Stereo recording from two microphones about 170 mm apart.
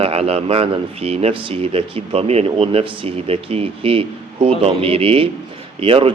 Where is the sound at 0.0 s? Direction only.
35° right (ahead or behind).